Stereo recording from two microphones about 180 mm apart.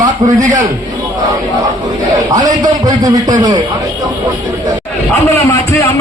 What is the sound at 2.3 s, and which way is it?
A man's voice, 20° right (ahead or behind).